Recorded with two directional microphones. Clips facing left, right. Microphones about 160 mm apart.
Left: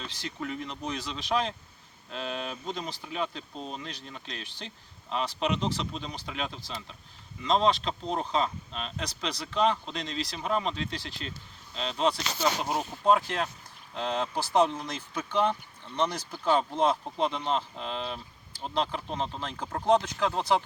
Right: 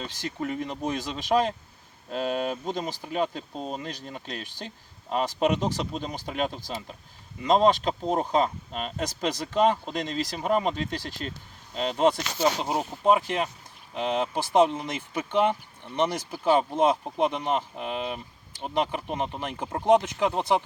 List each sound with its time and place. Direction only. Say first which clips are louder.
0.0 s speech: right 5 dB; 45° right (ahead or behind)
12.4 s speech: right 3 dB; 20° right (ahead or behind)